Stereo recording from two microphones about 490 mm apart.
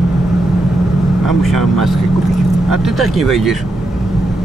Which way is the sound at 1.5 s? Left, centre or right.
Right.